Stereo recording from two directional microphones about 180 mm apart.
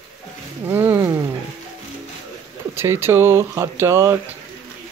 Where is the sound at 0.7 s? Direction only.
10° right (ahead or behind).